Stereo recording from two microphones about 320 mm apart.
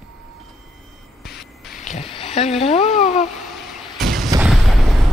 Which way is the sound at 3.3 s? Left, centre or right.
Centre.